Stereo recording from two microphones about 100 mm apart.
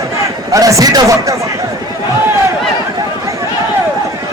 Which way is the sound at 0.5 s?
35° right (ahead or behind).